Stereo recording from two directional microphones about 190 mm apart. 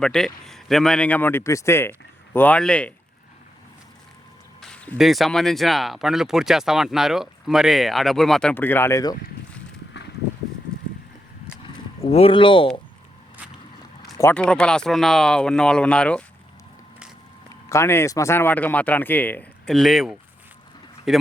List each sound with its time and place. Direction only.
0.0 s speech: 5° left (ahead or behind)
4.6 s speech: 5° left (ahead or behind)
11.6 s a sound: 30° left (ahead or behind)
14.2 s speech: 10° left (ahead or behind)
17.7 s speech: 15° left (ahead or behind)